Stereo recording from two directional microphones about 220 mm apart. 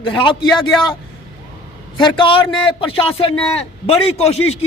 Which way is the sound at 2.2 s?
20° left (ahead or behind).